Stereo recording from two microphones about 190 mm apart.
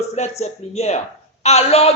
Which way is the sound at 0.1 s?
35° left (ahead or behind).